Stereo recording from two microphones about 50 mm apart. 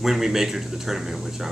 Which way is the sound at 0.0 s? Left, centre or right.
Centre.